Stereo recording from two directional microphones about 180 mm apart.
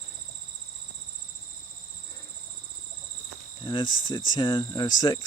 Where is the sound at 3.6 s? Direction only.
25° left (ahead or behind).